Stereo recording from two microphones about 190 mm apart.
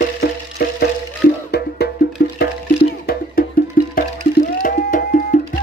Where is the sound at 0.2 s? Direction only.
60° left (ahead or behind).